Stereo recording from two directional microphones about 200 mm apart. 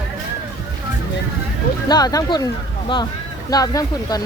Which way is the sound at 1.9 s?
20° left (ahead or behind).